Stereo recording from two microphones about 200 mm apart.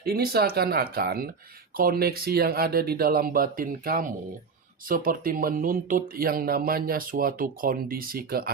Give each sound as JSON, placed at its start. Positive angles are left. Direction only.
{"t": 0.0, "sound": "speech", "side_deg": -50}